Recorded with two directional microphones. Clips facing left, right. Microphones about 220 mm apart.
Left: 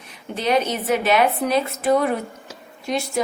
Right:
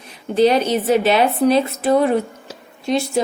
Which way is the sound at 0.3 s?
30° right (ahead or behind).